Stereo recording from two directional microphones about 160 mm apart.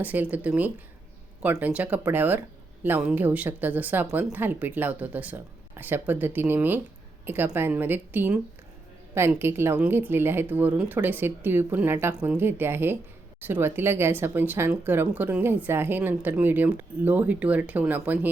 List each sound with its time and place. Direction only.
0.0 s speech: 10° right (ahead or behind)